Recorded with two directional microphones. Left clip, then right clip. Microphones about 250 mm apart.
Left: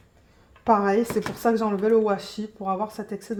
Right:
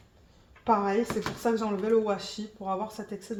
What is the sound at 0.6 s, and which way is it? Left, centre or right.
Speech, left.